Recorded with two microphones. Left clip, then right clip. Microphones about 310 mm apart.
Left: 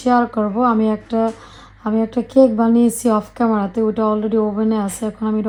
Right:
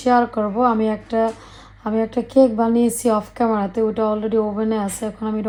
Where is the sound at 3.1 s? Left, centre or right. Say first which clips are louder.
Left 1 dB; left.